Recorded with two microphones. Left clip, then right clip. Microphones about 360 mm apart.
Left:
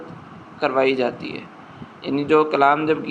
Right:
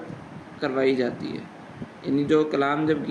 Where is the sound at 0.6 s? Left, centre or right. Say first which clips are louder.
Left 4 dB; centre.